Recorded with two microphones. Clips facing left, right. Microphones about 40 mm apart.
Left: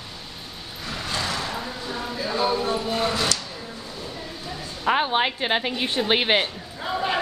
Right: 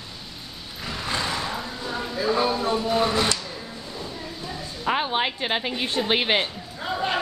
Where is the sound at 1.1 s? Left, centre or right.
Right.